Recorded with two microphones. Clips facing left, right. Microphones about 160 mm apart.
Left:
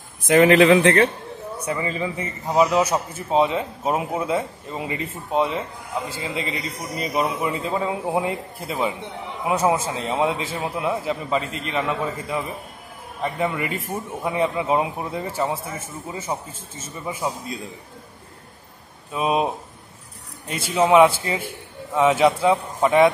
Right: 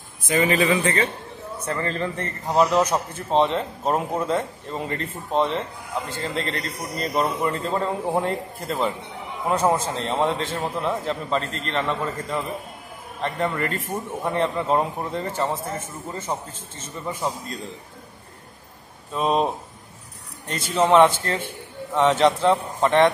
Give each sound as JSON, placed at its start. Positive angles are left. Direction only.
{"t": 0.4, "sound": "speech", "side_deg": 75}
{"t": 0.8, "sound": "a man's voice", "side_deg": 60}
{"t": 1.6, "sound": "a man's voice", "side_deg": 10}
{"t": 19.1, "sound": "a man's voice", "side_deg": 5}